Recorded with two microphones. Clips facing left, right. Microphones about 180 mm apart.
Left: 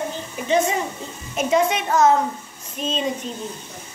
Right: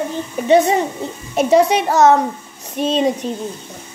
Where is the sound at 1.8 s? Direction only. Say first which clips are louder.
Right 4 dB; 75° right (ahead or behind).